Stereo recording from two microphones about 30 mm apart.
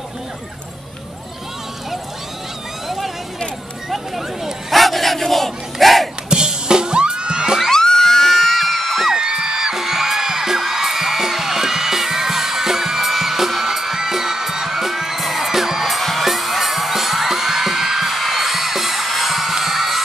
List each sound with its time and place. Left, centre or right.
4.6 s battle cry: centre
6.3 s music: right
7.7 s music: centre
9.1 s music: right; by 16.0 s centre
16.0 s music: centre